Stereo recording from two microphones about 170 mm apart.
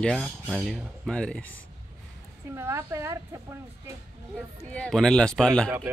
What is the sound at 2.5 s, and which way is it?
Speech, 15° right (ahead or behind).